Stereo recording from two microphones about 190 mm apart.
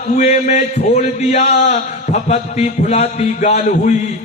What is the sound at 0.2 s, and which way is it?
A man's voice, 35° left (ahead or behind).